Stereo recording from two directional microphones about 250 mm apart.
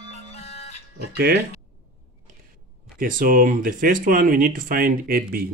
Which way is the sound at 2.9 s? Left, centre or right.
Right.